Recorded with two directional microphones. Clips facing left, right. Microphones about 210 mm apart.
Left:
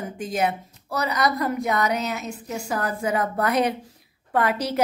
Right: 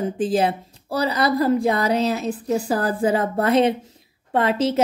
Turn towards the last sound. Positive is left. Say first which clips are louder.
# right 4 dB
turn(degrees=-25)  # may be behind; listen again after turning